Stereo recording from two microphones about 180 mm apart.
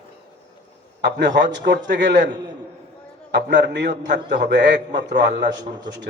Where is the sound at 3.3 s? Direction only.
70° right (ahead or behind).